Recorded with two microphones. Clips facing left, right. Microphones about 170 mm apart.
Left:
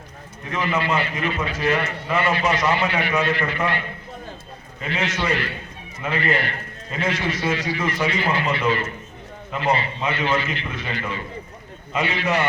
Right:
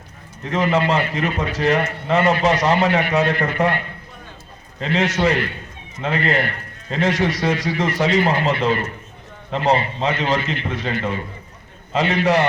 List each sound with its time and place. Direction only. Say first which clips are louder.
0.5 s a man's voice: right 5 dB; 40° right (ahead or behind)
4.9 s a man's voice: right 6 dB; 40° right (ahead or behind)